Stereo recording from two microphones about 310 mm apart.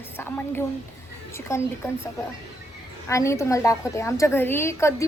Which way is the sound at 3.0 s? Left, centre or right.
Centre.